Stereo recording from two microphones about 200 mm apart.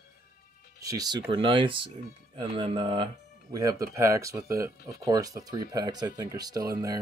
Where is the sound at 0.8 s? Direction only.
15° right (ahead or behind).